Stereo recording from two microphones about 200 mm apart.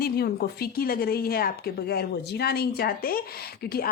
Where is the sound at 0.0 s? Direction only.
50° left (ahead or behind).